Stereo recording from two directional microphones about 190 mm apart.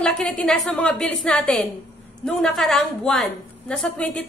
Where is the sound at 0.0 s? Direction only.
5° left (ahead or behind).